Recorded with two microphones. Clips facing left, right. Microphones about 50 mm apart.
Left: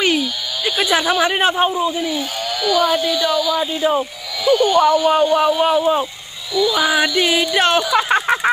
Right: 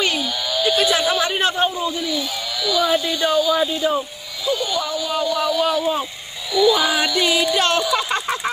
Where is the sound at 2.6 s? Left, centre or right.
Left.